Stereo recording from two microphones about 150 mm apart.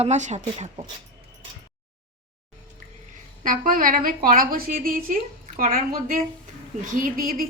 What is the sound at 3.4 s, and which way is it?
A woman's voice, 65° right (ahead or behind).